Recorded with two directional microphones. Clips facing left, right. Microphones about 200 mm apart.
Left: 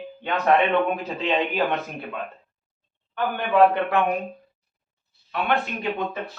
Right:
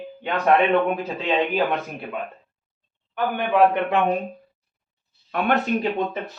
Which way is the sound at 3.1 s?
15° right (ahead or behind).